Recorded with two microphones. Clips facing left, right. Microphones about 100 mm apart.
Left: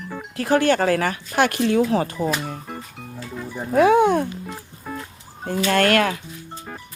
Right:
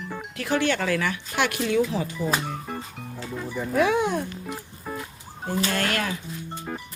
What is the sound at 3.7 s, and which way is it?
Speech, 45° left (ahead or behind).